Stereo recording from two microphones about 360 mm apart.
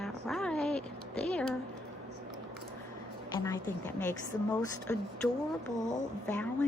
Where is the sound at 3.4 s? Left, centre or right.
Centre.